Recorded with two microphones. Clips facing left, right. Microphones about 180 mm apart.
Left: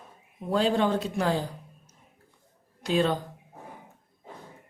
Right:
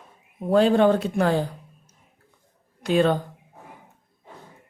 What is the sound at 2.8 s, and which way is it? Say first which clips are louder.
Speech: right 5 dB; 55° right (ahead or behind).